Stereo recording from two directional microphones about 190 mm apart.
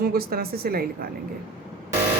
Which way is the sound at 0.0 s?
50° right (ahead or behind).